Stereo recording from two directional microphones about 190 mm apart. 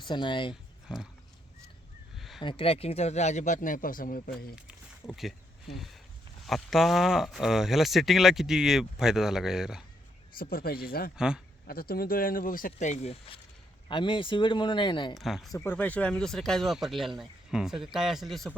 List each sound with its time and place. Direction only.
0.0 s speech: 25° left (ahead or behind)
2.1 s a sound: centre (ahead or behind)
2.4 s speech: 25° left (ahead or behind); by 4.2 s 45° left (ahead or behind)
5.7 s speech: centre (ahead or behind)
10.3 s speech: 50° left (ahead or behind); by 15.1 s 25° left (ahead or behind)
15.1 s speech: centre (ahead or behind)
15.5 s speech: 10° left (ahead or behind)